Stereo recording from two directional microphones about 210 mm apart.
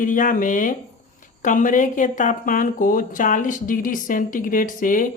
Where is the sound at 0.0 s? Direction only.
40° left (ahead or behind).